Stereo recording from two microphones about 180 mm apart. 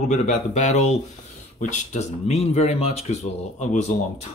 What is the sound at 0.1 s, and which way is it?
Speech, 40° left (ahead or behind).